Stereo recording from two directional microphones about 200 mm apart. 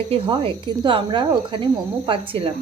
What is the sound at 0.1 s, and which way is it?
Speech, 25° right (ahead or behind).